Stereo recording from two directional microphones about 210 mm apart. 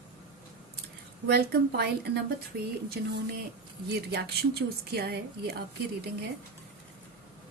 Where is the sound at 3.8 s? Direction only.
50° right (ahead or behind).